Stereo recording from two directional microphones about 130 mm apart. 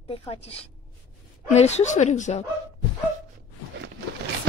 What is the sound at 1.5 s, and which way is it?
Speech, 60° left (ahead or behind).